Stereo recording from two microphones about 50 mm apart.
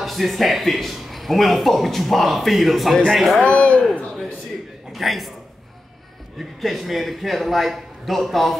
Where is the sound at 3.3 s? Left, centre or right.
Left.